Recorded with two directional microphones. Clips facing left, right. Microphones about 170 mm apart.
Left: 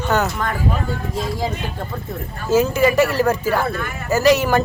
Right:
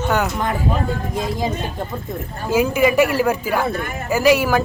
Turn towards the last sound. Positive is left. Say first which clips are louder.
# even
turn(degrees=-10)  # may be behind; listen again after turning